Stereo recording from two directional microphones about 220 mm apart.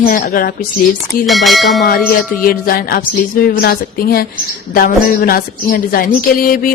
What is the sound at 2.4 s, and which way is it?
Speech, 40° left (ahead or behind).